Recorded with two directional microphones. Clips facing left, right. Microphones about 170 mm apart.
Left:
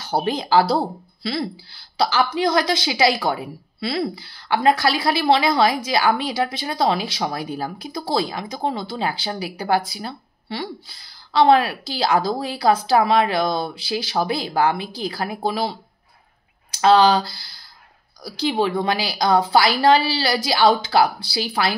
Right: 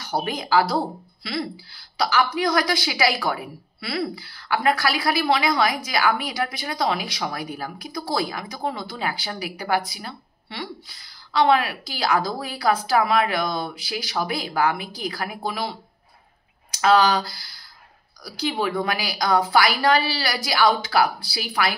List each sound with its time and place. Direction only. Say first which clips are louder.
0.0 s a woman's voice: left 4 dB; 30° left (ahead or behind)
16.7 s a woman's voice: left 3 dB; 30° left (ahead or behind)